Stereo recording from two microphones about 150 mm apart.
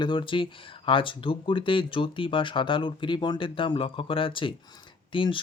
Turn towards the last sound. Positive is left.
turn(degrees=35)  # may be behind; listen again after turning